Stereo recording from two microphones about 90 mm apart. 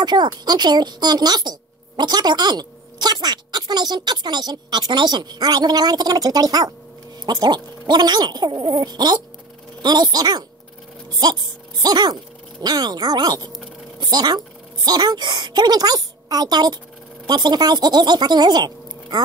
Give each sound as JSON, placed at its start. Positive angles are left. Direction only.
{"t": 0.0, "sound": "speech", "side_deg": -50}